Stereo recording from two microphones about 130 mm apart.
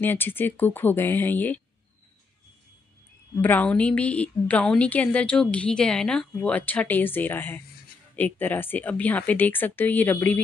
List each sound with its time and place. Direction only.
0.0 s a woman's voice: 15° left (ahead or behind)
3.3 s a woman's voice: 10° left (ahead or behind)